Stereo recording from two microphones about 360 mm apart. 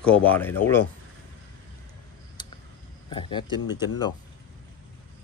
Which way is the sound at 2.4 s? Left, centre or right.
Centre.